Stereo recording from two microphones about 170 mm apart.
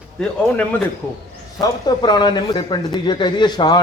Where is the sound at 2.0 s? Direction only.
25° left (ahead or behind).